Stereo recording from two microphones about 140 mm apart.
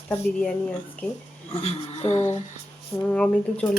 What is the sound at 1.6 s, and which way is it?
Speech, 50° left (ahead or behind).